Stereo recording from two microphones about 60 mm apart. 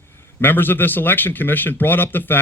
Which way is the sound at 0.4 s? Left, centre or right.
Left.